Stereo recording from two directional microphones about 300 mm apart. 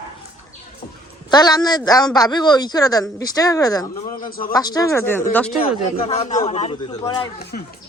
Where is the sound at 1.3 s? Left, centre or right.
Centre.